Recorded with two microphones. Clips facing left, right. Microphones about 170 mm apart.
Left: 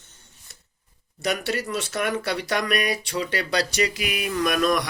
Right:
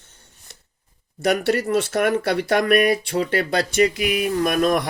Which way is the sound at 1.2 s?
55° right (ahead or behind).